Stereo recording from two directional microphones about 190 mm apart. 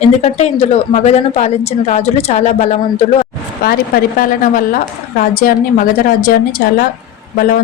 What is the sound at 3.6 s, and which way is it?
A woman's voice, 50° left (ahead or behind).